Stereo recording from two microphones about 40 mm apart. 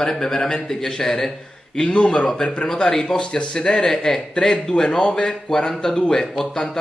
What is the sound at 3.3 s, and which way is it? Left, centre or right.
Speech, left.